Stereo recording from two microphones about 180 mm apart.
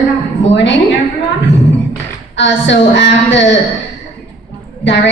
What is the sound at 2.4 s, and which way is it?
Speech, 90° left.